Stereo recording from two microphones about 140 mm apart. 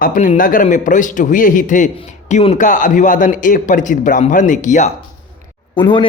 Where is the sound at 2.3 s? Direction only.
55° left (ahead or behind).